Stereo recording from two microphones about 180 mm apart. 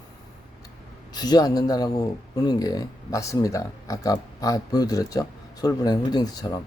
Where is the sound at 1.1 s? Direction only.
20° left (ahead or behind).